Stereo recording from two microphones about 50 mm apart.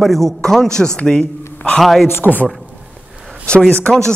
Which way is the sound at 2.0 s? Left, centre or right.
Left.